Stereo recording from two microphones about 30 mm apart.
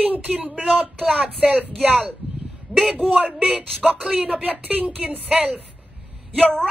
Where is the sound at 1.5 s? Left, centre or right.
Right.